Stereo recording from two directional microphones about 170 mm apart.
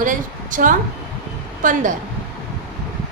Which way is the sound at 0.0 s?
50° right (ahead or behind).